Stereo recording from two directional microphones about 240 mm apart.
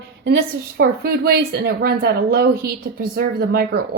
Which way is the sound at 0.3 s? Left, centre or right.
Right.